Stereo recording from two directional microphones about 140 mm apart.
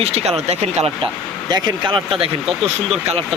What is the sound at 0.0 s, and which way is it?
Speech, 45° right (ahead or behind).